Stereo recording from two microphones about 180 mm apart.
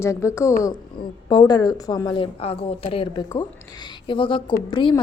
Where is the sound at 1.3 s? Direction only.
25° left (ahead or behind).